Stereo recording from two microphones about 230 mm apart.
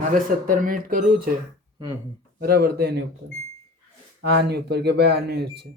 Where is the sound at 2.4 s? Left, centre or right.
Right.